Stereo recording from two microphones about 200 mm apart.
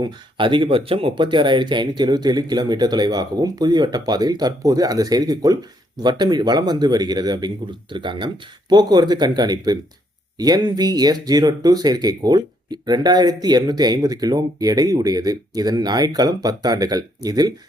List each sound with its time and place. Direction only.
0.0 s speech: 25° right (ahead or behind)